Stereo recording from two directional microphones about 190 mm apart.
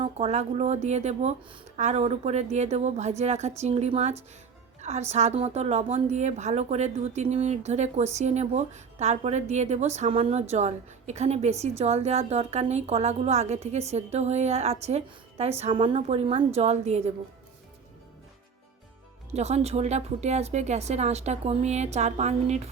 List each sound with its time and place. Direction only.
0.0 s a woman's voice: 35° right (ahead or behind)
19.3 s a woman's voice: 35° right (ahead or behind)